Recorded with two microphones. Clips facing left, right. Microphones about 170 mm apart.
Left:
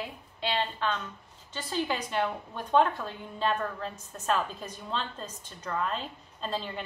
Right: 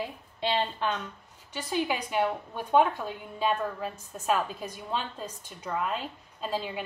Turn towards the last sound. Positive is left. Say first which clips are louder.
# right 2 dB
turn(degrees=-10)  # may be behind; listen again after turning